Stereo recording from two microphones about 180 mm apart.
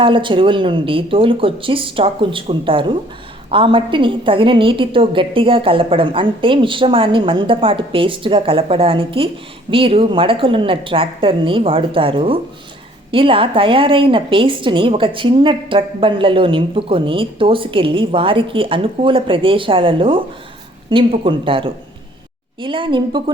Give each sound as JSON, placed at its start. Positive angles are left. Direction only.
{"t": 0.0, "sound": "a woman's voice", "side_deg": -25}